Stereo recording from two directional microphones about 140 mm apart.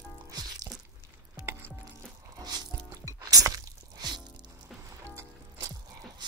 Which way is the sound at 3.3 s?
25° right (ahead or behind).